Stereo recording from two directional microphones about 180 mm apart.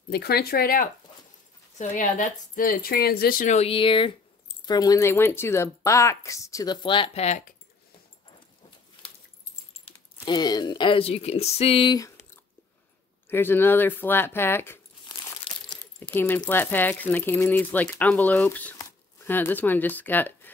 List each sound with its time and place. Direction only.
0.1 s speech: 60° left (ahead or behind)
1.8 s speech: 45° left (ahead or behind)
9.8 s speech: 25° left (ahead or behind)
13.3 s speech: 10° left (ahead or behind)
15.7 s coin: 10° left (ahead or behind)
16.4 s speech: 10° left (ahead or behind)